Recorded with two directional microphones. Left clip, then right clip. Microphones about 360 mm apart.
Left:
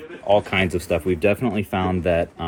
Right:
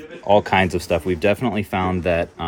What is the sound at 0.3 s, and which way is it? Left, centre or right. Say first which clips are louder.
Speech: right 3 dB; right.